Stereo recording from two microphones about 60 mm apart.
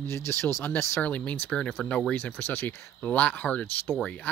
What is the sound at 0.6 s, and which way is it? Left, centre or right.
Speech, left.